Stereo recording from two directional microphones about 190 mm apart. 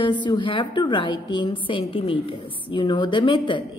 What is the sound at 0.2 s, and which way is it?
A woman's voice, 25° left (ahead or behind).